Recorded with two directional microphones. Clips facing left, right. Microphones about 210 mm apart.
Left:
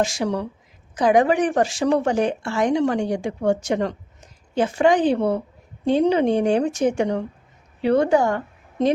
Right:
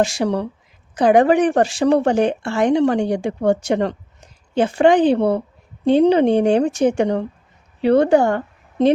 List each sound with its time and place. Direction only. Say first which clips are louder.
0.2 s speech: right 4 dB; 30° right (ahead or behind)
0.9 s a woman's voice: right 3 dB; 60° right (ahead or behind)
1.4 s a woman's voice: right 4 dB; 35° right (ahead or behind)